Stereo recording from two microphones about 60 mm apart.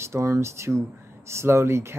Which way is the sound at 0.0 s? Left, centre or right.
Right.